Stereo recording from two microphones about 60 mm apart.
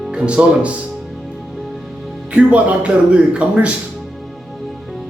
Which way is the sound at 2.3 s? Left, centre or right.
Right.